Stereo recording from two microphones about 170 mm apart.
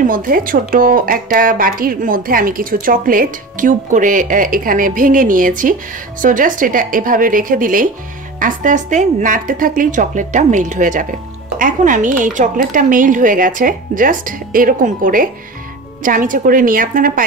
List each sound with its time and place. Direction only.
0.0 s speech: 55° right (ahead or behind)